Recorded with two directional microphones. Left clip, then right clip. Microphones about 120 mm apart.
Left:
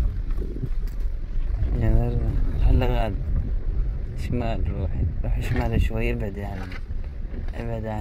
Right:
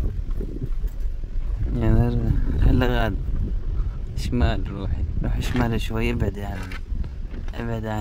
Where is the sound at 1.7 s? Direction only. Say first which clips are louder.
Right 4 dB; 55° right (ahead or behind).